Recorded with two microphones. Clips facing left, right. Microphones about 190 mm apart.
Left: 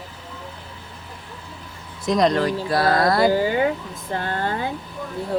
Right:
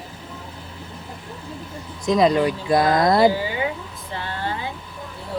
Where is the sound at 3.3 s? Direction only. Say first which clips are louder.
Left 5 dB; 45° left (ahead or behind).